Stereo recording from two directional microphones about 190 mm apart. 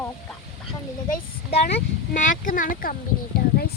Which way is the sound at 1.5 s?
40° left (ahead or behind).